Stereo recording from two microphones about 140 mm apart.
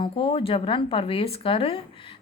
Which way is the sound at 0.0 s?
40° left (ahead or behind).